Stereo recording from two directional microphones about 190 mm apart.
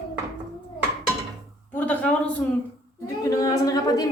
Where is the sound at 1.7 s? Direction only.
10° left (ahead or behind).